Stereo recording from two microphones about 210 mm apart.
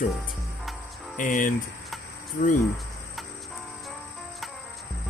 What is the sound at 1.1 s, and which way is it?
Speech, 40° left (ahead or behind).